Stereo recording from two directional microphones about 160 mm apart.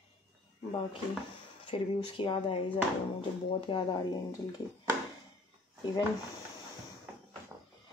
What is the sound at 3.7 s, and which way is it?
Speech, 25° left (ahead or behind).